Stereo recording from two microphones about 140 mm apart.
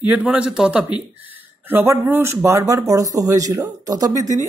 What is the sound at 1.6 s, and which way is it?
Speech, 15° right (ahead or behind).